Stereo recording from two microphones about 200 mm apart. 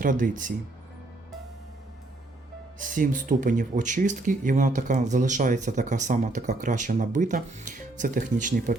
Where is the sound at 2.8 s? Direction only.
40° right (ahead or behind).